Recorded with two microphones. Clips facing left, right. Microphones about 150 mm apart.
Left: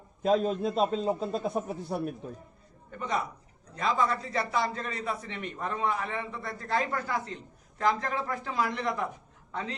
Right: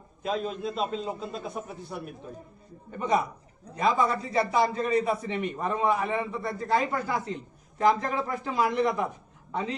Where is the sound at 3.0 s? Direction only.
15° right (ahead or behind).